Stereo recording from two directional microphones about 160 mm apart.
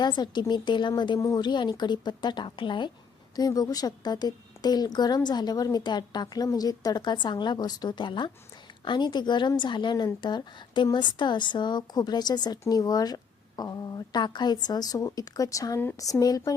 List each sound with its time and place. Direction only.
0.0 s a woman's voice: 25° left (ahead or behind)